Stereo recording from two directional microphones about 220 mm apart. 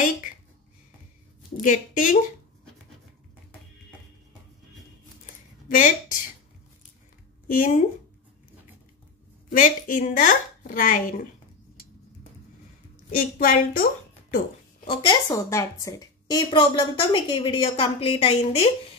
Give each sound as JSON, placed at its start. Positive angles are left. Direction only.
{"t": 1.6, "sound": "a woman's voice", "side_deg": 35}
{"t": 5.2, "sound": "a sound", "side_deg": 35}
{"t": 7.4, "sound": "speech", "side_deg": 35}
{"t": 9.5, "sound": "a woman's voice", "side_deg": 35}
{"t": 13.1, "sound": "a woman's voice", "side_deg": 40}
{"t": 14.9, "sound": "a woman's voice", "side_deg": 20}